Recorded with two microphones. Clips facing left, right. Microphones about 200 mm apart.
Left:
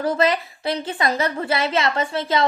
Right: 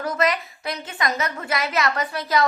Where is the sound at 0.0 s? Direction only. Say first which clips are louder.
Left 3 dB; 30° left (ahead or behind).